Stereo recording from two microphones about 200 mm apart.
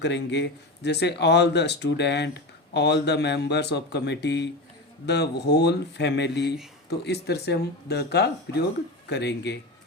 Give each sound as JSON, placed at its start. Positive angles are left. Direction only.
{"t": 0.0, "sound": "speech", "side_deg": 60}